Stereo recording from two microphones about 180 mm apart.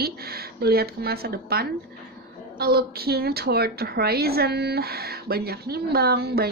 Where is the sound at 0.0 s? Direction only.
60° right (ahead or behind).